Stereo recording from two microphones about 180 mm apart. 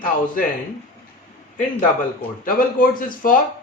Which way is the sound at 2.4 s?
50° left (ahead or behind).